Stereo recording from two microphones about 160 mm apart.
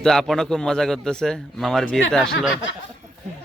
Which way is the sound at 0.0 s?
5° left (ahead or behind).